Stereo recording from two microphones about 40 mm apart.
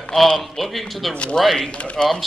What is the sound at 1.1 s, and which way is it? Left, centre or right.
Speech, left.